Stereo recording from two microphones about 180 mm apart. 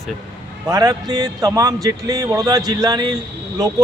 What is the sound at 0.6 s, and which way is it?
A man's voice, 20° right (ahead or behind).